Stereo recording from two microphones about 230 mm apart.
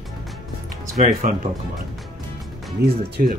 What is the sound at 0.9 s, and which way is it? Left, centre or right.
Speech, right.